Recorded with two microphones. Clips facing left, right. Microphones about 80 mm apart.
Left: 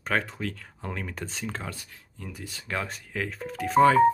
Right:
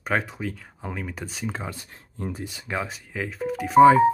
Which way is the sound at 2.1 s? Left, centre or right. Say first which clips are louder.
Right 9 dB; right.